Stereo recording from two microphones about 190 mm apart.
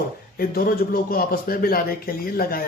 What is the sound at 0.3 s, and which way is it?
Speech, 50° left (ahead or behind).